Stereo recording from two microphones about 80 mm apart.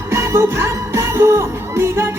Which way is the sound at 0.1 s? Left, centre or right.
Right.